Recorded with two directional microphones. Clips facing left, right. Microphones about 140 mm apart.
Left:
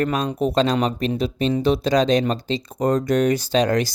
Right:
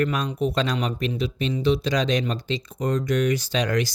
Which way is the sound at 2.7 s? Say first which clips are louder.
Left 5 dB; 50° left (ahead or behind).